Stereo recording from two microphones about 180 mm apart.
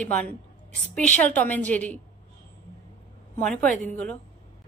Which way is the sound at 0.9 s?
5° left (ahead or behind).